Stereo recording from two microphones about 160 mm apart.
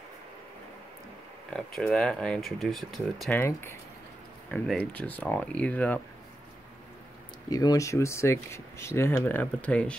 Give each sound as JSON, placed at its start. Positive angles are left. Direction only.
{"t": 1.5, "sound": "speech", "side_deg": 5}
{"t": 3.3, "sound": "speech", "side_deg": 15}
{"t": 7.4, "sound": "speech", "side_deg": 25}